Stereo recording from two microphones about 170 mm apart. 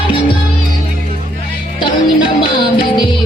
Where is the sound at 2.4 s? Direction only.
30° left (ahead or behind).